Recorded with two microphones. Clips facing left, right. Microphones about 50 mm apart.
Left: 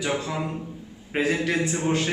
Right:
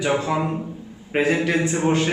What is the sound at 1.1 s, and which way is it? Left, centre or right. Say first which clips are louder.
Speech: right 4 dB; centre.